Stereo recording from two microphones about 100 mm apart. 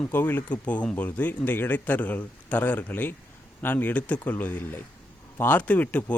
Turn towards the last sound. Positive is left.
turn(degrees=15)  # may be behind; listen again after turning